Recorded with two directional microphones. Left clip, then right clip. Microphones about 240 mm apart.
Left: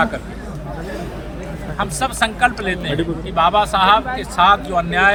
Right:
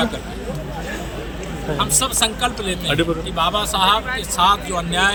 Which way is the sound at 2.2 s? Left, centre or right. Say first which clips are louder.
Left 3 dB; left.